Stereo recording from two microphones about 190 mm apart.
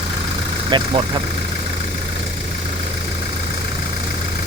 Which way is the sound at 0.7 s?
25° right (ahead or behind).